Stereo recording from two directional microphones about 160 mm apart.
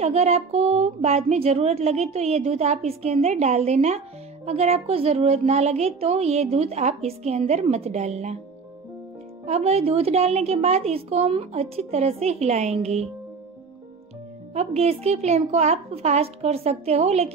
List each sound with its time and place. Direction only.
0.0 s speech: 40° right (ahead or behind)
9.5 s speech: 40° right (ahead or behind)
14.5 s speech: 40° right (ahead or behind)